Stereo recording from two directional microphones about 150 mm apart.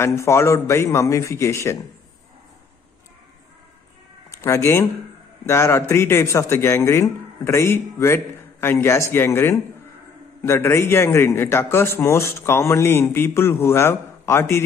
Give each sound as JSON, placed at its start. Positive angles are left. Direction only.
{"t": 0.0, "sound": "a man's voice", "side_deg": 20}
{"t": 4.4, "sound": "a man's voice", "side_deg": 20}